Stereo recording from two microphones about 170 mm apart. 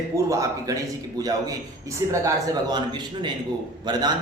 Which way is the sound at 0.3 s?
20° right (ahead or behind).